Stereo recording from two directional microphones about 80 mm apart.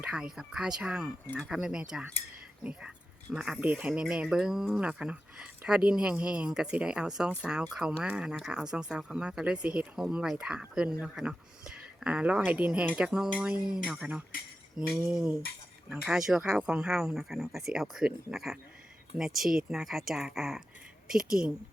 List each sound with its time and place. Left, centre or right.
0.0 s speech: centre
3.3 s speech: centre
13.1 s speech: centre